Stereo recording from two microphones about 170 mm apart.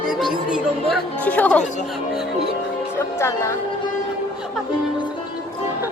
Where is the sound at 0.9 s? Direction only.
10° left (ahead or behind).